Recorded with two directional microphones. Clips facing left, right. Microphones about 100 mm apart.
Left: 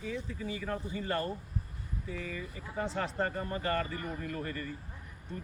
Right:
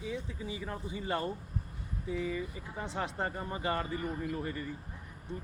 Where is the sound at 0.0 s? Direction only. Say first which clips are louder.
Left 1 dB; 15° right (ahead or behind).